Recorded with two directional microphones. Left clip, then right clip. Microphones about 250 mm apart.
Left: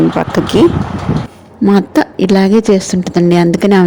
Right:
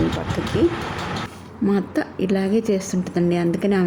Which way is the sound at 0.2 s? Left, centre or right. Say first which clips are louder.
Left 12 dB; left.